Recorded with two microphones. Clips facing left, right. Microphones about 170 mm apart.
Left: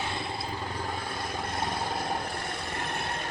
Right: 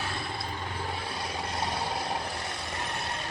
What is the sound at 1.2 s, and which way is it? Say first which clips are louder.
Vehicle: even; 50° left (ahead or behind).